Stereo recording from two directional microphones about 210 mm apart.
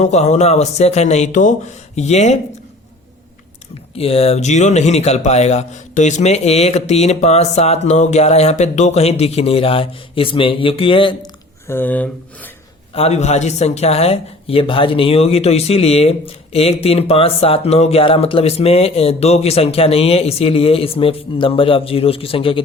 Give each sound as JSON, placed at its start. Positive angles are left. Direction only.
{"t": 0.0, "sound": "speech", "side_deg": 30}
{"t": 3.9, "sound": "speech", "side_deg": 30}
{"t": 11.7, "sound": "speech", "side_deg": 10}
{"t": 12.9, "sound": "speech", "side_deg": 30}